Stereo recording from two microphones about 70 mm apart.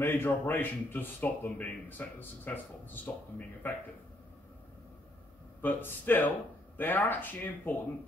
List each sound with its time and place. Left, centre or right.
0.0 s speech: left
5.6 s speech: left